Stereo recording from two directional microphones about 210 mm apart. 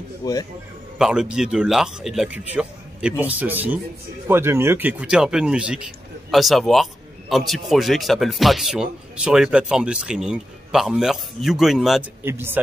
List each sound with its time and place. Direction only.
0.2 s speech: 15° left (ahead or behind)
0.9 s a man's voice: 5° right (ahead or behind)